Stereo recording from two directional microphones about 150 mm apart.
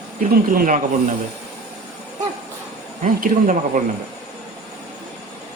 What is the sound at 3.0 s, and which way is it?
Speech, 60° right (ahead or behind).